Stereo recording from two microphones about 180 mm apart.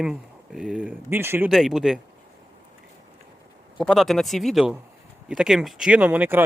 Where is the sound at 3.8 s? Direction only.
Centre (ahead or behind).